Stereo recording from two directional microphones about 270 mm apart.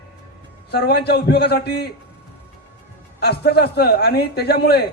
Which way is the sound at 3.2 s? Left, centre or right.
Left.